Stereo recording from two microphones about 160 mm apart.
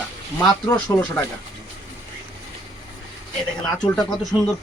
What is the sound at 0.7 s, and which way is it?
Speech, 20° left (ahead or behind).